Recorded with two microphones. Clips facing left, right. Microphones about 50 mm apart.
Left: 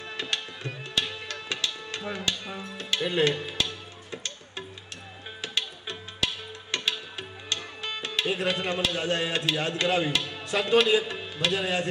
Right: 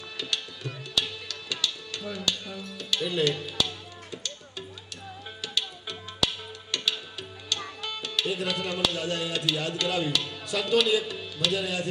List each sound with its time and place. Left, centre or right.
0.2 s music: left